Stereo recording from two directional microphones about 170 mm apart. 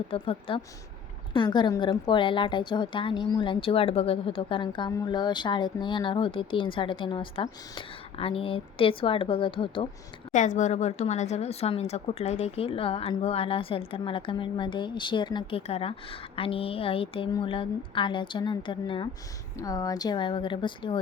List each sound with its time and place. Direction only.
0.1 s a woman's voice: 30° left (ahead or behind)
10.3 s a woman's voice: 45° left (ahead or behind); by 21.0 s 30° left (ahead or behind)